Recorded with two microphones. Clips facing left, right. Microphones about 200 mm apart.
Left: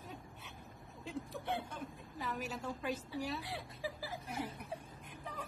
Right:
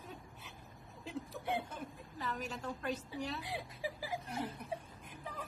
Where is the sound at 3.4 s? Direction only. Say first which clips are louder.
Right 1 dB; 15° right (ahead or behind).